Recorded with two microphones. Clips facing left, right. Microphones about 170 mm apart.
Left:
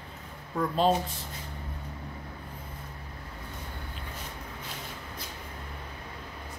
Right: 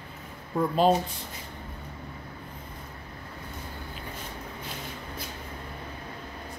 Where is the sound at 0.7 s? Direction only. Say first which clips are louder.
Right 3 dB; 5° right (ahead or behind).